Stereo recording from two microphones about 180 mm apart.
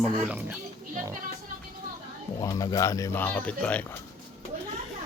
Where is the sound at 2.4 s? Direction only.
20° left (ahead or behind).